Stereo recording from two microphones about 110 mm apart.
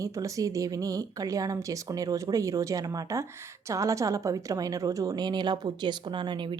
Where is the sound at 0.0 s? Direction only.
30° right (ahead or behind).